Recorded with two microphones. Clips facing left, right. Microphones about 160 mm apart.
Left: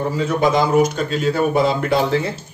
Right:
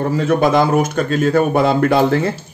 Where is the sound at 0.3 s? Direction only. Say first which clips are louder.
Right 3 dB; 55° right (ahead or behind).